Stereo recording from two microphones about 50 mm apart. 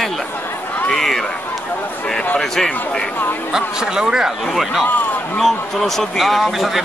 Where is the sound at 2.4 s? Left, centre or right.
Centre.